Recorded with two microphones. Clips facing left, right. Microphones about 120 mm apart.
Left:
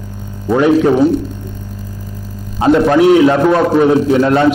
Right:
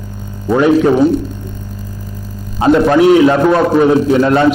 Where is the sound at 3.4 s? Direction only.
25° right (ahead or behind).